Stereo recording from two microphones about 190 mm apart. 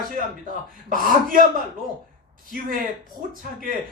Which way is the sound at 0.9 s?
45° right (ahead or behind).